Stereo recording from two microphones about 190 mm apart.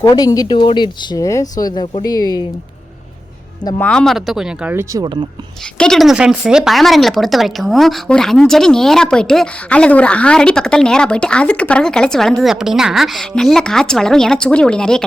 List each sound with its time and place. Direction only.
0.0 s speech: 20° left (ahead or behind)
3.8 s speech: 5° left (ahead or behind); by 5.2 s 20° right (ahead or behind)
5.7 s speech: 5° left (ahead or behind)